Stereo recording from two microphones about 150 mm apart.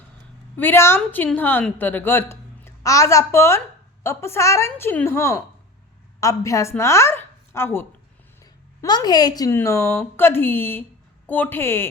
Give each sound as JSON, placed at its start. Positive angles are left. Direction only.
{"t": 0.5, "sound": "a woman's voice", "side_deg": 15}